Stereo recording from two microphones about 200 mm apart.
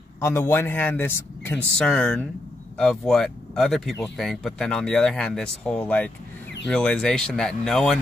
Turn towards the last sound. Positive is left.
turn(degrees=0)  # may be behind; listen again after turning